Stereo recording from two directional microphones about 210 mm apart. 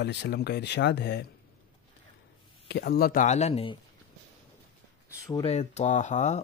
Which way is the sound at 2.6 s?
50° left (ahead or behind).